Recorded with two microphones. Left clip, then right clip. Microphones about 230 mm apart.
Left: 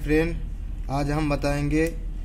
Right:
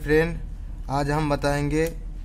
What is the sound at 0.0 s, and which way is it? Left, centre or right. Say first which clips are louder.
Speech: right 2 dB; right.